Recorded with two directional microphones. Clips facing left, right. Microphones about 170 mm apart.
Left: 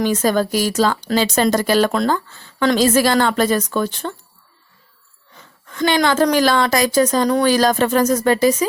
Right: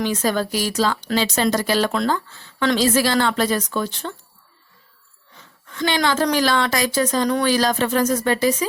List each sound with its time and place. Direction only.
0.0 s speech: 45° left (ahead or behind)
5.7 s speech: 45° left (ahead or behind)